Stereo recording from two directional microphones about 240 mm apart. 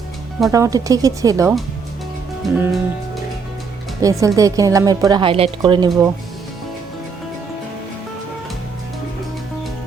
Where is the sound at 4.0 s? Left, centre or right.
Centre.